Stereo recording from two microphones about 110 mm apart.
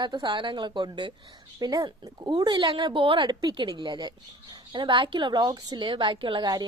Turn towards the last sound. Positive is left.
turn(degrees=-45)  # may be behind; listen again after turning